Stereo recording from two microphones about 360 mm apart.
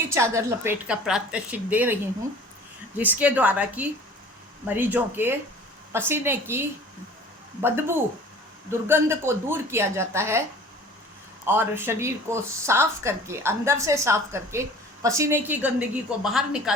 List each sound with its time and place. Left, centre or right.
0.1 s a woman's voice: centre
3.0 s a woman's voice: centre
11.4 s a woman's voice: centre